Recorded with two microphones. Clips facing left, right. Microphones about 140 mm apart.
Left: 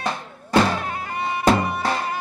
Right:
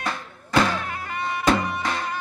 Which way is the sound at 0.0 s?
30° left (ahead or behind).